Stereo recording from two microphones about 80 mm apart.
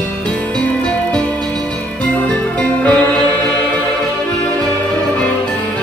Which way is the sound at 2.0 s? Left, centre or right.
Centre.